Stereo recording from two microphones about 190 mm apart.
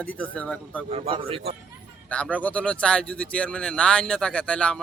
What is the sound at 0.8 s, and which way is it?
Speech, 30° right (ahead or behind).